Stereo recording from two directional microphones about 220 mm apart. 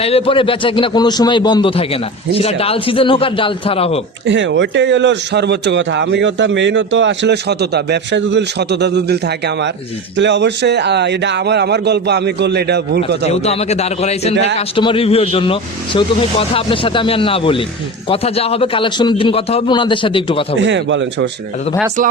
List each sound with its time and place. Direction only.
0.0 s a man's voice: 25° left (ahead or behind)
4.3 s a man's voice: 55° right (ahead or behind)
13.4 s a man's voice: 30° left (ahead or behind)
20.6 s speech: 55° right (ahead or behind)